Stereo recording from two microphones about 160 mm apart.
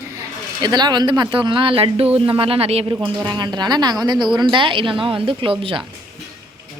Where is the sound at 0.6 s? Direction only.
25° right (ahead or behind).